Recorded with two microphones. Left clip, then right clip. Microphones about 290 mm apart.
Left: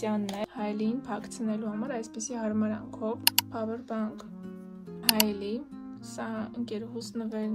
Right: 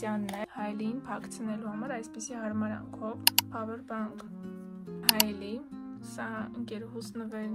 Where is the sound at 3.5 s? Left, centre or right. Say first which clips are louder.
Left 3 dB; centre.